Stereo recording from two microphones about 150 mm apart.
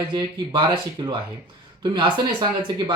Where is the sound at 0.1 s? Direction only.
30° right (ahead or behind).